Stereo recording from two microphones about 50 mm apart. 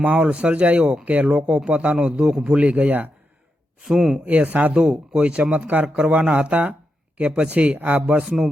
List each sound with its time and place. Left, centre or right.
0.0 s speech: right
2.6 s speech: right
3.8 s speech: centre
4.3 s speech: right
5.6 s speech: right
8.2 s speech: centre